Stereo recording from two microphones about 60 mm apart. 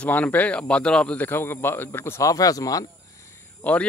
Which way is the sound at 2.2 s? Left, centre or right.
Left.